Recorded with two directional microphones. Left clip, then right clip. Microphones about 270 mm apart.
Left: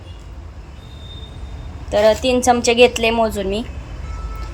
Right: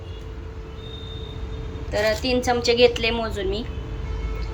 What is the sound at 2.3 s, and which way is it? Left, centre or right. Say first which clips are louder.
Speech: left 6 dB; centre.